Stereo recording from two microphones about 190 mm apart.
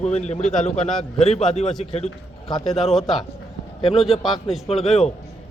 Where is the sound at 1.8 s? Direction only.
35° left (ahead or behind).